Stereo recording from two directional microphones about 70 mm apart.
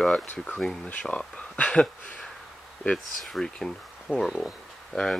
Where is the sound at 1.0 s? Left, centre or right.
Centre.